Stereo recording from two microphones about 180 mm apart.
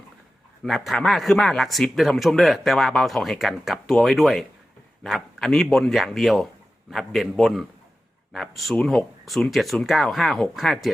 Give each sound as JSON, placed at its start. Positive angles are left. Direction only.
{"t": 0.6, "sound": "speech", "side_deg": 0}